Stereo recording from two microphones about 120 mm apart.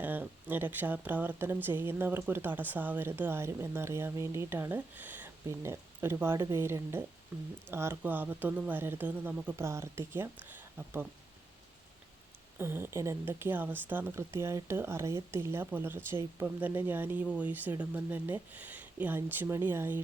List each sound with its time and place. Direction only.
0.0 s speech: 15° right (ahead or behind)
12.5 s speech: 20° right (ahead or behind)